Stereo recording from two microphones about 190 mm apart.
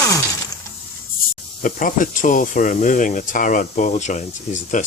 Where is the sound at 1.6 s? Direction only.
45° left (ahead or behind).